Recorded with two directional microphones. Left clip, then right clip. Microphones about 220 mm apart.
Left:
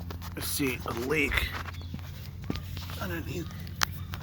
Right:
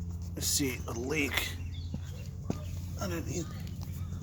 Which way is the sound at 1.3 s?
15° right (ahead or behind).